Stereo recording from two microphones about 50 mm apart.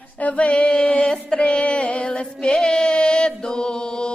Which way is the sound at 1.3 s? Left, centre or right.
Centre.